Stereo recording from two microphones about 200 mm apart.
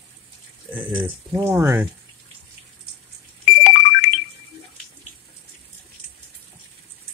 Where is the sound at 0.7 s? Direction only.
10° right (ahead or behind).